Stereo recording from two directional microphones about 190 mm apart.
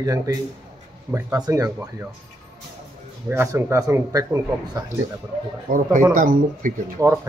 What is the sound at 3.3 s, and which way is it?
Speech, 15° right (ahead or behind).